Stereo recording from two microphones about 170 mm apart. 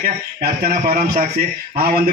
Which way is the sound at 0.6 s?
60° right (ahead or behind).